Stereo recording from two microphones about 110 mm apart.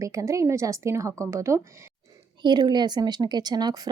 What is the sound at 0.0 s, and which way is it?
A woman's voice, 30° right (ahead or behind).